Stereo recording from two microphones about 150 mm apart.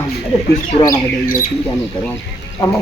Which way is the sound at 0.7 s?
45° left (ahead or behind).